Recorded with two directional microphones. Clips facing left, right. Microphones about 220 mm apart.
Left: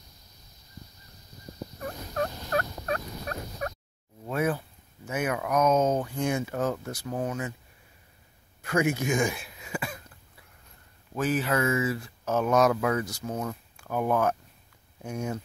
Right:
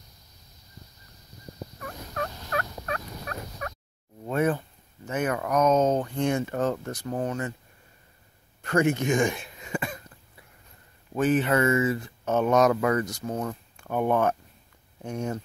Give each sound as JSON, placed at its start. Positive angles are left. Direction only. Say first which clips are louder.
{"t": 2.1, "sound": "fowl", "louder": "left 3 dB", "side_deg": 35}
{"t": 4.3, "sound": "speech", "louder": "right 3 dB", "side_deg": 5}
{"t": 8.6, "sound": "throat clearing", "louder": "right 3 dB", "side_deg": 5}
{"t": 11.1, "sound": "speech", "louder": "right 4 dB", "side_deg": 0}